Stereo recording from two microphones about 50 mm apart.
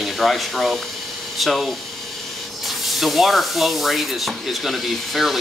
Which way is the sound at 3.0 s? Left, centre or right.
Centre.